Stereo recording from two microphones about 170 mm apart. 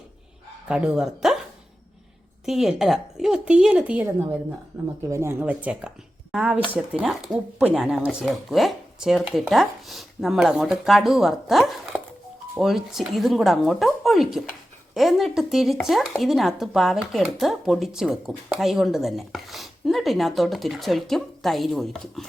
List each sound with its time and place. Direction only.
0.7 s speech: 5° right (ahead or behind)
2.5 s speech: centre (ahead or behind)